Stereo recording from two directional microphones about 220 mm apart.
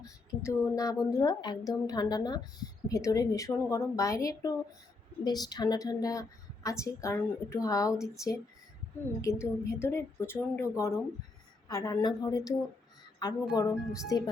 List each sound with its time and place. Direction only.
0.0 s a woman's voice: 15° left (ahead or behind)